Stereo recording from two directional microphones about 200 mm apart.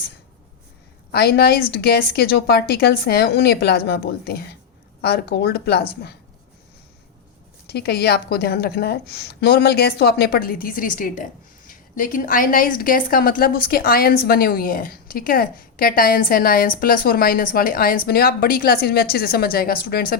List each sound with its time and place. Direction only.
1.1 s a woman's voice: 55° left (ahead or behind)
7.7 s a woman's voice: 55° left (ahead or behind)